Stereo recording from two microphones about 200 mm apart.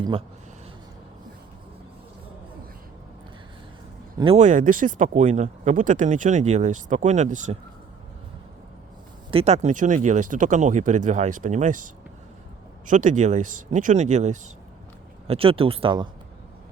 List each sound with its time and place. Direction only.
4.2 s speech: 30° right (ahead or behind)
9.3 s speech: 35° right (ahead or behind)
12.9 s speech: 40° right (ahead or behind)